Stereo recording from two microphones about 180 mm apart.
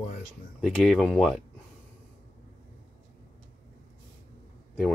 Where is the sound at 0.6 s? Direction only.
Centre (ahead or behind).